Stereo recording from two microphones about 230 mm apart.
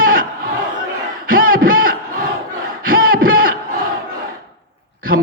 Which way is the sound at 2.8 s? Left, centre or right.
Right.